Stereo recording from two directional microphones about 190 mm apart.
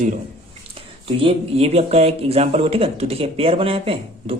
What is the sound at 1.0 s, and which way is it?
Speech, 30° right (ahead or behind).